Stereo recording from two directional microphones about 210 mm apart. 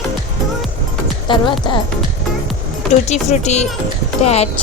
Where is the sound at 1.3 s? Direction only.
25° left (ahead or behind).